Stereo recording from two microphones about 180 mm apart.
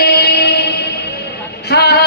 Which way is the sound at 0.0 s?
65° left (ahead or behind).